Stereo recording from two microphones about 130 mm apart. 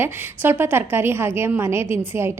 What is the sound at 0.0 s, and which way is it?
A woman's voice, 15° right (ahead or behind).